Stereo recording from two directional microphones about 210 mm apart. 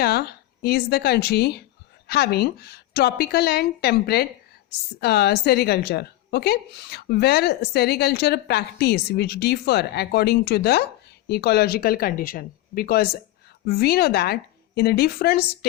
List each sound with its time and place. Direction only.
0.0 s a woman's voice: 50° left (ahead or behind)